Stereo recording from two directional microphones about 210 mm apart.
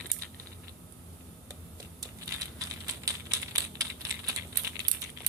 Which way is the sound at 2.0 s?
15° right (ahead or behind).